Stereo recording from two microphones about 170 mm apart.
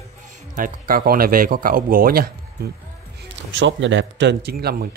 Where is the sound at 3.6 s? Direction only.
90° right; by 4.9 s 65° right (ahead or behind).